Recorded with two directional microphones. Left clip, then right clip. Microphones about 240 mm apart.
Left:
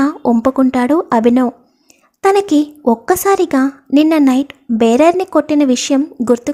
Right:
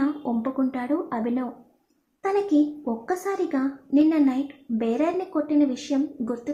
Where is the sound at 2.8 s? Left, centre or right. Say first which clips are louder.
Left 15 dB; left.